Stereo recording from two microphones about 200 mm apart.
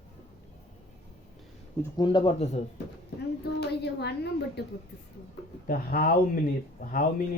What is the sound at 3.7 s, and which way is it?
Speech, 55° left (ahead or behind).